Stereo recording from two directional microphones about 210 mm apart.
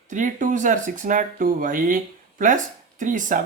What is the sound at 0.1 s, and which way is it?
A woman's voice, 40° right (ahead or behind).